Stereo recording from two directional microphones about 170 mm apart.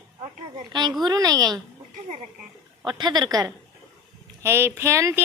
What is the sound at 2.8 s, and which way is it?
A woman's voice, 25° right (ahead or behind).